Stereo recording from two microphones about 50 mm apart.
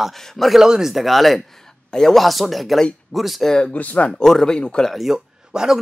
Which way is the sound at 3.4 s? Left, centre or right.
Centre.